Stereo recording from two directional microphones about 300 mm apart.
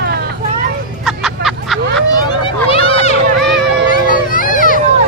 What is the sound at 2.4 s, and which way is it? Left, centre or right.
Run, centre.